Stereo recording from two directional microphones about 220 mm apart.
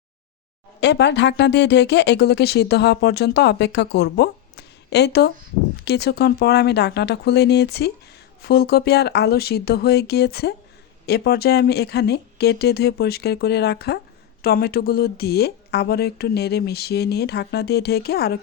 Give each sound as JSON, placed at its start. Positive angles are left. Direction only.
{"t": 0.8, "sound": "speech", "side_deg": 50}